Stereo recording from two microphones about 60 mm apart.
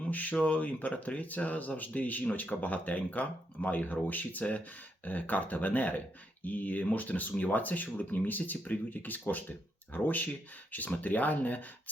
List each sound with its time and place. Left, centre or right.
0.0 s speech: left